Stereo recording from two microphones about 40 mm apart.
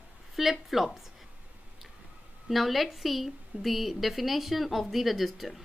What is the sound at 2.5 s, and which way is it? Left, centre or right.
A woman's voice, centre.